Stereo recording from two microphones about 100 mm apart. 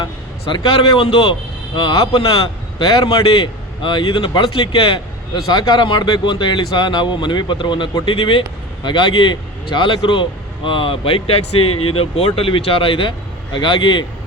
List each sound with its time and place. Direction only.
0.5 s a man's voice: 55° left (ahead or behind)
2.8 s a man's voice: 40° left (ahead or behind)